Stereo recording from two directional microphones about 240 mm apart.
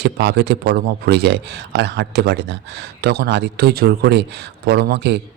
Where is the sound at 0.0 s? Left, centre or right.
Right.